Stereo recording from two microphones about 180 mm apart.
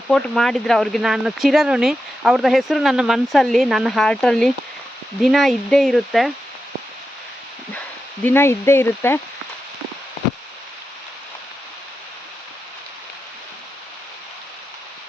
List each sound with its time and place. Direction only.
0.1 s speech: centre (ahead or behind)
8.2 s speech: 10° left (ahead or behind)